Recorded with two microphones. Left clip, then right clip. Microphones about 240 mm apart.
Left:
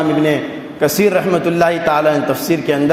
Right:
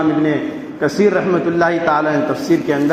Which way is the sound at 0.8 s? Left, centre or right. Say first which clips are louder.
Left 1 dB; left.